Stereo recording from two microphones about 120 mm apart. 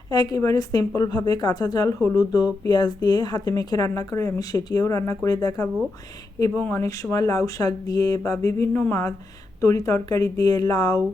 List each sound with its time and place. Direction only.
0.1 s speech: 35° left (ahead or behind)
6.6 s speech: 15° left (ahead or behind)
6.8 s speech: 25° left (ahead or behind)